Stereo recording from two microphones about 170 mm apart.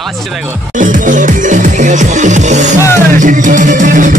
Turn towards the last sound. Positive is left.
turn(degrees=-50)  # may be behind; listen again after turning